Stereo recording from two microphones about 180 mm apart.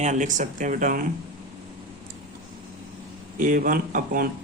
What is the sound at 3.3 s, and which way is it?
Speech, 50° right (ahead or behind).